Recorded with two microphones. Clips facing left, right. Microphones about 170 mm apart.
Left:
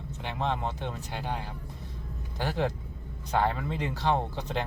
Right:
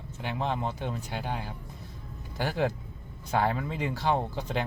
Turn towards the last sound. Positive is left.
turn(degrees=-5)  # may be behind; listen again after turning